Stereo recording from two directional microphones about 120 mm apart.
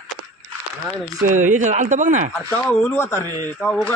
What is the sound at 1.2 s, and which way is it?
Speech, 90° right.